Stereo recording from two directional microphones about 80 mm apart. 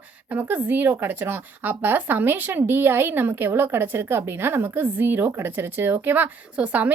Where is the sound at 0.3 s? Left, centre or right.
Right.